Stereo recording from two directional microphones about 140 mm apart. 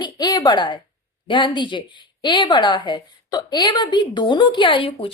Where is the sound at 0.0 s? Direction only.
30° left (ahead or behind).